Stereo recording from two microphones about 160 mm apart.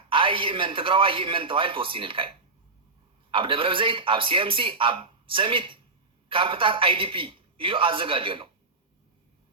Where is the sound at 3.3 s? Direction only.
35° right (ahead or behind).